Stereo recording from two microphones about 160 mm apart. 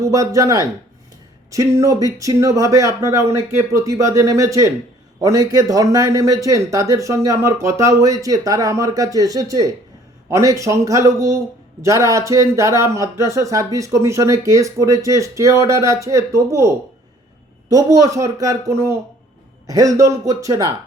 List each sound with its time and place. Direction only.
0.0 s a man's voice: 20° right (ahead or behind)